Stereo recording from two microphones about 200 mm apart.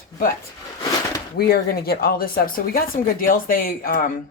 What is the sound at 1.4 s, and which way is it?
Speech, 50° left (ahead or behind).